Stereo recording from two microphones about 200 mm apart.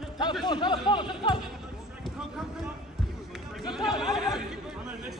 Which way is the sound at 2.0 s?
Centre (ahead or behind).